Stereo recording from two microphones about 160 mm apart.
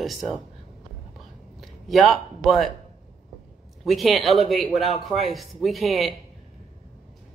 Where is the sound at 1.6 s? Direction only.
Centre (ahead or behind).